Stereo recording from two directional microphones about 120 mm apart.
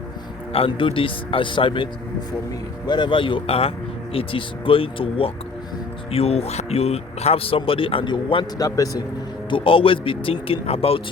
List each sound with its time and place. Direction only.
0.5 s speech: 50° left (ahead or behind)
8.5 s a man's voice: 30° left (ahead or behind)
9.5 s speech: 45° left (ahead or behind)